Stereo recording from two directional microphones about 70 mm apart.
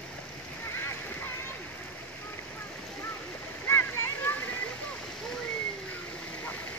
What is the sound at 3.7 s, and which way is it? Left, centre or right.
Splash, left.